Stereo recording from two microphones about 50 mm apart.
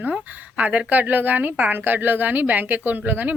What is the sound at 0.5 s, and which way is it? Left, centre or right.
Speech, right.